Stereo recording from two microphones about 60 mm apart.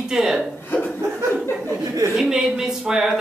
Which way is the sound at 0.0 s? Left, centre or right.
Centre.